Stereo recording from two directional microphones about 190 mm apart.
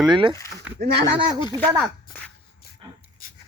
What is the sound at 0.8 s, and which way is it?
Speech, 60° right (ahead or behind).